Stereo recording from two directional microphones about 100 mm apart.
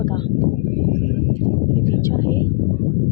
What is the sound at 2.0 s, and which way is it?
Speech, 35° left (ahead or behind).